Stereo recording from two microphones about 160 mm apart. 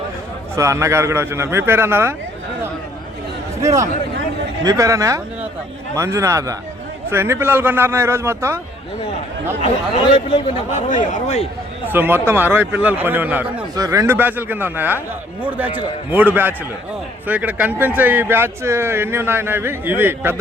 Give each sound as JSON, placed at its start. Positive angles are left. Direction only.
{"t": 0.5, "sound": "speech", "side_deg": -20}
{"t": 3.6, "sound": "speech", "side_deg": -20}
{"t": 9.6, "sound": "speech", "side_deg": 40}
{"t": 11.9, "sound": "speech", "side_deg": -15}